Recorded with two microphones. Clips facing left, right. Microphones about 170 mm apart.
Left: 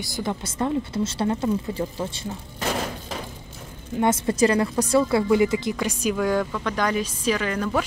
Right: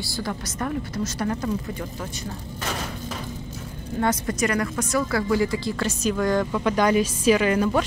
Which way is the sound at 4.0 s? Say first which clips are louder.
Left 4 dB; 25° left (ahead or behind).